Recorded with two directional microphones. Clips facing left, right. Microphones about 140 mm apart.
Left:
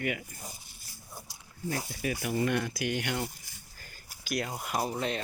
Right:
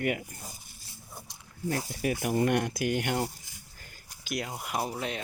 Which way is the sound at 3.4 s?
20° right (ahead or behind).